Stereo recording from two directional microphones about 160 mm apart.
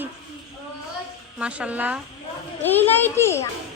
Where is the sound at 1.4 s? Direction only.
5° right (ahead or behind).